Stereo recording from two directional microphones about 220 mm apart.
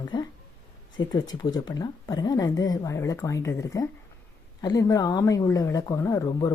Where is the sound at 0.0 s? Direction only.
20° left (ahead or behind).